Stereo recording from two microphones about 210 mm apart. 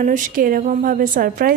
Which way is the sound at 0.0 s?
40° right (ahead or behind).